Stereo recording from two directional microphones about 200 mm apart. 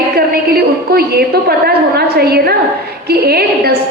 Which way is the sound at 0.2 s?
50° right (ahead or behind).